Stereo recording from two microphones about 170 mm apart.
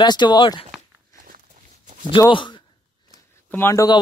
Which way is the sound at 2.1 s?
30° left (ahead or behind).